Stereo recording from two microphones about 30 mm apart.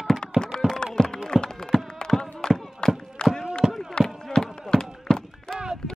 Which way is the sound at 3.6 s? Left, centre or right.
Right.